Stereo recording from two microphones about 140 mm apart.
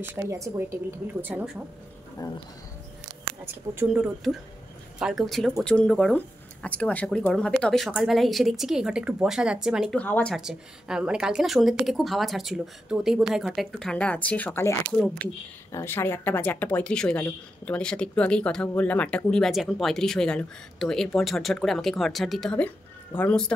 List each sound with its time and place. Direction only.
0.0 s speech: 20° right (ahead or behind)
1.2 s speech: 10° right (ahead or behind)
2.2 s speech: 30° left (ahead or behind)
3.9 s speech: 5° right (ahead or behind)
9.9 s speech: 10° left (ahead or behind)
10.3 s speech: 5° right (ahead or behind)